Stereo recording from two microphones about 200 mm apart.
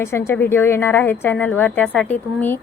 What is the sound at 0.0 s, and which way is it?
A woman's voice, 10° left (ahead or behind).